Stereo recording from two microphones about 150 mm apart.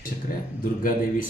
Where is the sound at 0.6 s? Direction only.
70° left (ahead or behind).